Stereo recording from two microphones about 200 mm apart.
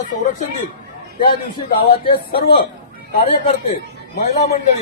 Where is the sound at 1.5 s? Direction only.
25° left (ahead or behind).